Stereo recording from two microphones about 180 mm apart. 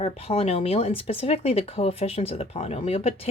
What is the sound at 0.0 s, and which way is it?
A woman's voice, 35° left (ahead or behind).